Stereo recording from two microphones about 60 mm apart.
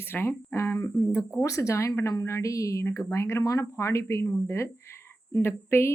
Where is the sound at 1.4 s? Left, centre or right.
Left.